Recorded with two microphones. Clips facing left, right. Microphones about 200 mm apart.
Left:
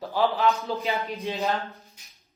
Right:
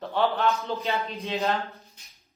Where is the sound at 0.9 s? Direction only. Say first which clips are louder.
Even; 15° left (ahead or behind).